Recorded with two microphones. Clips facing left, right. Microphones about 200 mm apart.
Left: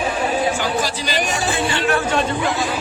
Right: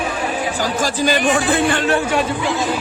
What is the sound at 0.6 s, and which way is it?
Speech, 45° right (ahead or behind).